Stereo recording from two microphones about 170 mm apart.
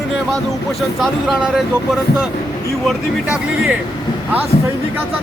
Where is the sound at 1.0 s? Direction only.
5° right (ahead or behind).